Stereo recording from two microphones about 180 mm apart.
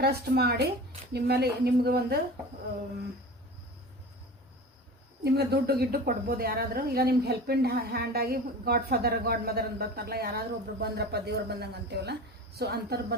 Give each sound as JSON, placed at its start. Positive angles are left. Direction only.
{"t": 0.0, "sound": "a woman's voice", "side_deg": -60}
{"t": 5.2, "sound": "a woman's voice", "side_deg": -65}